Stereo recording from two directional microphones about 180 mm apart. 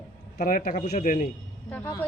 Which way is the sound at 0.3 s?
50° left (ahead or behind).